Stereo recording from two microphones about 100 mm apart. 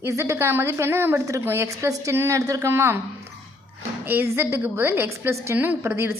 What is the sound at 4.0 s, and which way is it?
A woman's voice, 20° right (ahead or behind).